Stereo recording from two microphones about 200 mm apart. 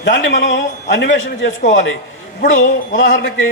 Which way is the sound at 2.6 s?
70° left (ahead or behind).